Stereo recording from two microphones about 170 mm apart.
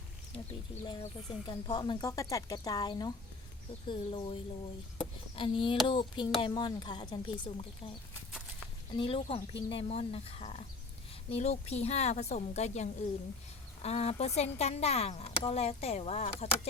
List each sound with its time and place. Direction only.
0.9 s speech: 30° left (ahead or behind)
9.0 s speech: 30° left (ahead or behind)